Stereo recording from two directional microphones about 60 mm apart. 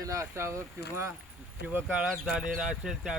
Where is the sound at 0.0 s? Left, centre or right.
Right.